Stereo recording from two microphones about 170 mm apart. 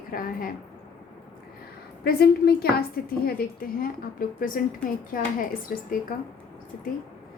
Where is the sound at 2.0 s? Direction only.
70° left (ahead or behind).